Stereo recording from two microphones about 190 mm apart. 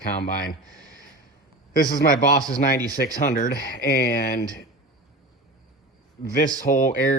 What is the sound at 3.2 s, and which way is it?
Speech, 45° left (ahead or behind).